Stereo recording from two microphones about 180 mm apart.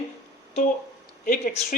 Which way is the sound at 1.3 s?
45° left (ahead or behind).